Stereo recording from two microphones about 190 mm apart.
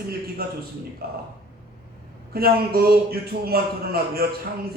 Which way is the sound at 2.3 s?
55° right (ahead or behind).